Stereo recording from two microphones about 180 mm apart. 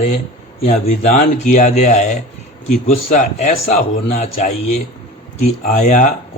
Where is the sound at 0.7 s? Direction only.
40° left (ahead or behind).